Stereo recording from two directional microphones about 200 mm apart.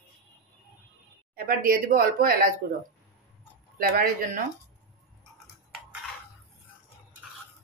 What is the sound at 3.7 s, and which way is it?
Speech, 40° right (ahead or behind).